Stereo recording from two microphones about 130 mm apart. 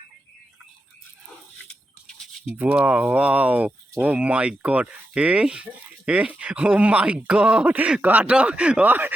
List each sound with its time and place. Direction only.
2.6 s speech: 10° right (ahead or behind)